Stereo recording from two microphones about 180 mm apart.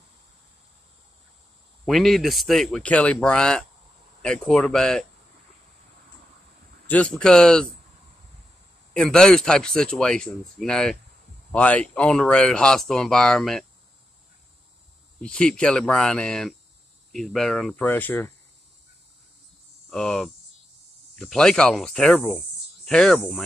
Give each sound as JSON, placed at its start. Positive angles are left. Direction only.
{"t": 1.9, "sound": "speech", "side_deg": 0}
{"t": 6.9, "sound": "speech", "side_deg": 5}
{"t": 8.9, "sound": "speech", "side_deg": 5}
{"t": 15.1, "sound": "speech", "side_deg": 5}
{"t": 19.9, "sound": "speech", "side_deg": 0}